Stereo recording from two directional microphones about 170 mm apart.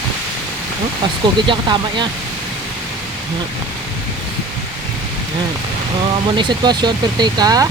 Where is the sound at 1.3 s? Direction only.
25° right (ahead or behind).